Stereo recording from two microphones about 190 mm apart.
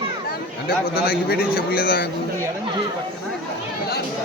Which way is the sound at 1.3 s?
50° left (ahead or behind).